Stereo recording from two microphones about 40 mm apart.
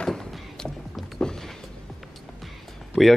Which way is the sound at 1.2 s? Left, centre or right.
Centre.